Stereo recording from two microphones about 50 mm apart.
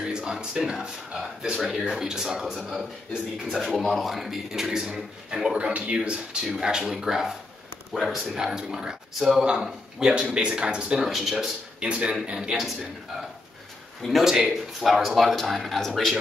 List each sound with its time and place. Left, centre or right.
0.0 s a man's voice: centre
5.9 s speech: centre
11.0 s speech: centre
11.8 s a man's voice: centre
14.0 s speech: centre